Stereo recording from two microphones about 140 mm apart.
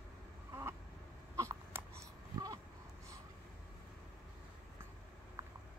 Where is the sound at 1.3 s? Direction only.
20° right (ahead or behind).